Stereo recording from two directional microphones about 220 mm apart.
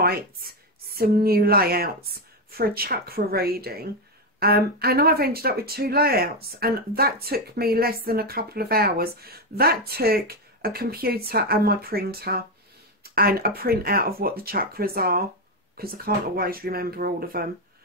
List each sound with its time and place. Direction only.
0.0 s speech: 45° right (ahead or behind)